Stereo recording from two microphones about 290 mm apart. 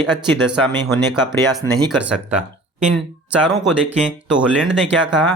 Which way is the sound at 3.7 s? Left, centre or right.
Centre.